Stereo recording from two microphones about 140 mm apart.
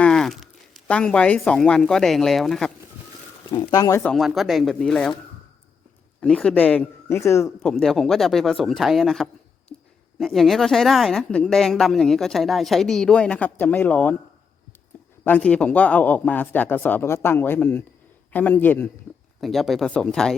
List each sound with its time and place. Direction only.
0.0 s a sound: 5° left (ahead or behind)
0.9 s speech: 5° left (ahead or behind)
3.5 s speech: 30° left (ahead or behind)
4.0 s speech: centre (ahead or behind)
6.1 s speech: 5° left (ahead or behind)
7.6 s speech: 5° left (ahead or behind)
15.2 s speech: 10° left (ahead or behind)
19.4 s speech: centre (ahead or behind)